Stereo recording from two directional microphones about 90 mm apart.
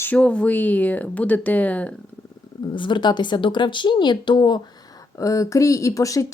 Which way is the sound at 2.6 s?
60° left (ahead or behind).